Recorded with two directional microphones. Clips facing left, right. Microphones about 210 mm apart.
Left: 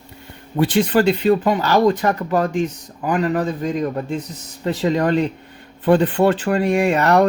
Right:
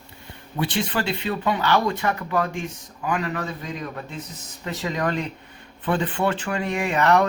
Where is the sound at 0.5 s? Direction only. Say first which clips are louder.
Left 9 dB; 45° left (ahead or behind).